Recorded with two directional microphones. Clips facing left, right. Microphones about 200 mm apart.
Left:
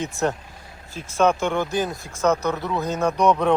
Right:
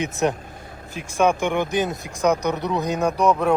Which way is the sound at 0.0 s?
20° right (ahead or behind).